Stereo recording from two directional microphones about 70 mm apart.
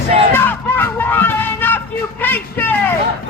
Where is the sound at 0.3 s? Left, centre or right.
Left.